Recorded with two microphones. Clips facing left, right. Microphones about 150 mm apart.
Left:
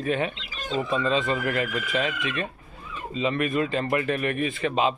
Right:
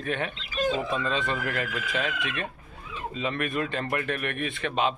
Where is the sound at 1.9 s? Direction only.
Centre (ahead or behind).